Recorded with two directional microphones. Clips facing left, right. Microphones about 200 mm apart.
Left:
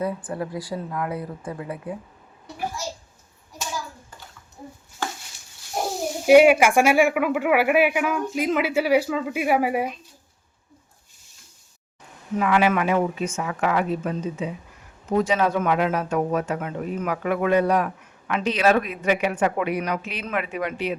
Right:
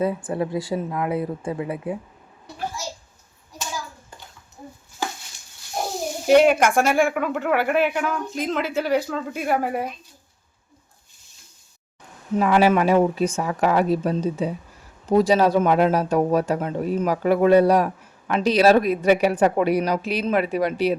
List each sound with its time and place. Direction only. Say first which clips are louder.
0.0 s speech: right 4 dB; 25° right (ahead or behind)
6.2 s speech: left 2 dB; 10° left (ahead or behind)
12.4 s speech: right 3 dB; 35° right (ahead or behind)